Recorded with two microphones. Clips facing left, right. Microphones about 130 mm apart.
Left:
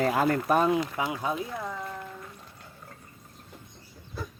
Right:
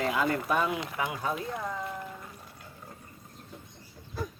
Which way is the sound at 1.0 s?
20° left (ahead or behind).